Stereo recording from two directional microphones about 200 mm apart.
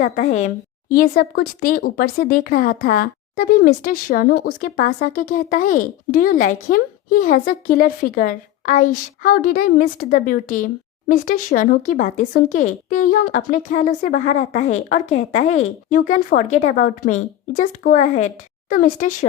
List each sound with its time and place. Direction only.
0.0 s a woman's voice: 35° left (ahead or behind)